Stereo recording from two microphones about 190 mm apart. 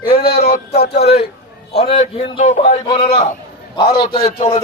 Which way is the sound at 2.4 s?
40° left (ahead or behind).